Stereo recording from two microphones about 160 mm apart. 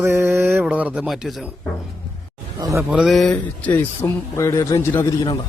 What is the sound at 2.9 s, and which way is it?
Speech, centre (ahead or behind).